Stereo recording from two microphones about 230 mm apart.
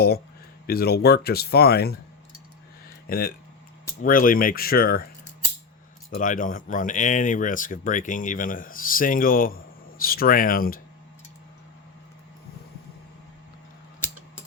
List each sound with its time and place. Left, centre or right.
0.7 s speech: left
3.1 s speech: left
6.1 s speech: left